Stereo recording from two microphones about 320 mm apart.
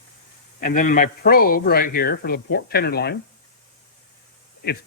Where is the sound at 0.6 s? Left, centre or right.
Left.